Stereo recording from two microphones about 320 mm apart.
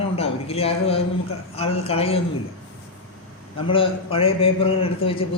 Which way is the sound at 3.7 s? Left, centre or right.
Centre.